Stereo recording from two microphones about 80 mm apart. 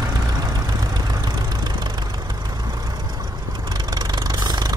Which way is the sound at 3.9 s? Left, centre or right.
Right.